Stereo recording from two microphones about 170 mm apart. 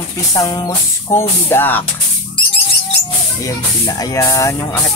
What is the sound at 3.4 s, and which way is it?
Speech, 20° left (ahead or behind).